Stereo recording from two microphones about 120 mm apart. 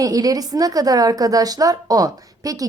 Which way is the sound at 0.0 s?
30° right (ahead or behind).